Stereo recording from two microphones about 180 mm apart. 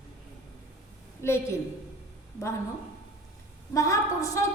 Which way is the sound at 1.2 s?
15° left (ahead or behind).